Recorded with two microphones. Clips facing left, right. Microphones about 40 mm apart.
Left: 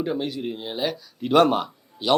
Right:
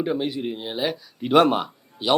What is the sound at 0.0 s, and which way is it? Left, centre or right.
Speech, centre.